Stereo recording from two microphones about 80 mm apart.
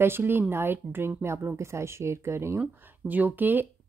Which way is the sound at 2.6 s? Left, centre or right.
Right.